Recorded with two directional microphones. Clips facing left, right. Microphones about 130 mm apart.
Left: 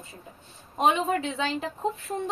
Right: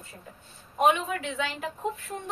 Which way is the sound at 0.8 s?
30° left (ahead or behind).